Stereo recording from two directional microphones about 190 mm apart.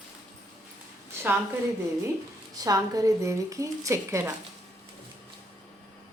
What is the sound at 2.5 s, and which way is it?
A woman's voice, 20° right (ahead or behind).